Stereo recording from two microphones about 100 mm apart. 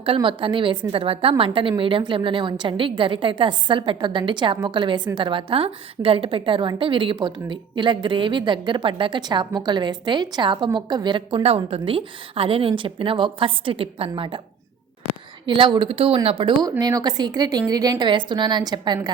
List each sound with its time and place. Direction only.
0.0 s a woman's voice: 60° right (ahead or behind)
11.4 s a woman's voice: 80° right; by 14.4 s 60° right (ahead or behind)
15.4 s a woman's voice: 55° right (ahead or behind)
16.6 s a woman's voice: 40° right (ahead or behind)